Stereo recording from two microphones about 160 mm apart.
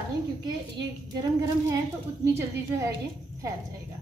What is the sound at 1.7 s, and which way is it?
A woman's voice, 20° right (ahead or behind).